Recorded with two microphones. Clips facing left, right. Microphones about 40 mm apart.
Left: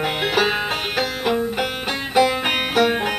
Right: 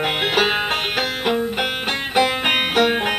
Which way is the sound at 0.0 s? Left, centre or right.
Right.